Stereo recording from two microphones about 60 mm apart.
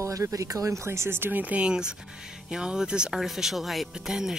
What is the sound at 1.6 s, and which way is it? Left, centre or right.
Speech, centre.